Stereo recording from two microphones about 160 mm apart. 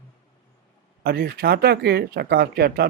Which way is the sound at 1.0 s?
75° right (ahead or behind).